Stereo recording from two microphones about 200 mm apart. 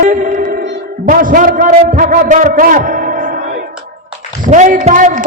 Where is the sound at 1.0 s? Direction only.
45° right (ahead or behind).